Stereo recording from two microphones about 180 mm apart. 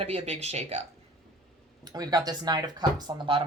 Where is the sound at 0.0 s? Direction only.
35° right (ahead or behind).